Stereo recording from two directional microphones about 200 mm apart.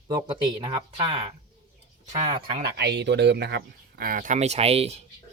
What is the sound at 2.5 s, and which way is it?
Speech, 50° right (ahead or behind).